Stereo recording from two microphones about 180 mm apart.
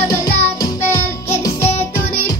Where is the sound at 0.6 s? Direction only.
15° left (ahead or behind).